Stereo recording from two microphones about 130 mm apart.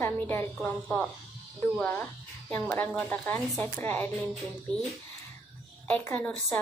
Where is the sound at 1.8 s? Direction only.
10° left (ahead or behind).